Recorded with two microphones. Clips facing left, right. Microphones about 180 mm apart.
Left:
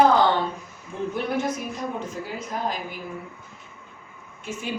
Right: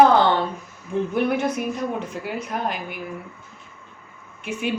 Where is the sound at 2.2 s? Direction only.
65° right (ahead or behind).